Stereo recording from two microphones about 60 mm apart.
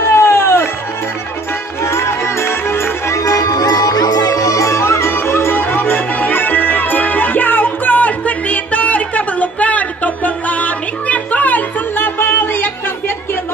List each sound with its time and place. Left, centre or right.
0.1 s music: left
1.9 s music: left
3.3 s music: left